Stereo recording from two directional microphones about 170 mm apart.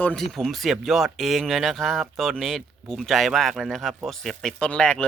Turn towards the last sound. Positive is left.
turn(degrees=5)  # may be behind; listen again after turning